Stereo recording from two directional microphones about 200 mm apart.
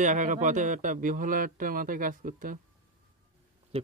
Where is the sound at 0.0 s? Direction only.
40° right (ahead or behind).